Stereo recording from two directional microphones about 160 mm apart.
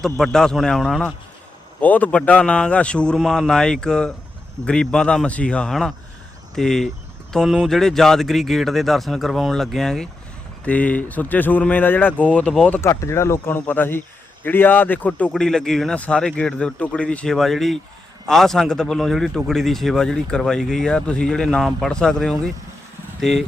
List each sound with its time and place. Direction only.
0.0 s a man's voice: 5° left (ahead or behind)
12.8 s a man's voice: 20° left (ahead or behind); by 23.5 s centre (ahead or behind)